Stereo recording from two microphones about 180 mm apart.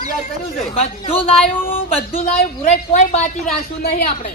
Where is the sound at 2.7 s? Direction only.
40° left (ahead or behind).